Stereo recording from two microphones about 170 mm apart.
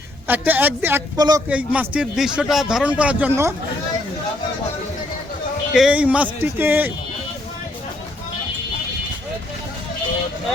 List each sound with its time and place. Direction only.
0.3 s speech: 10° right (ahead or behind)
1.1 s speech: 25° right (ahead or behind)
1.5 s speech: 10° right (ahead or behind)
5.7 s speech: 5° right (ahead or behind)